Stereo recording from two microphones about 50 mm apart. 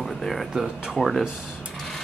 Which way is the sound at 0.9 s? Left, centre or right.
Centre.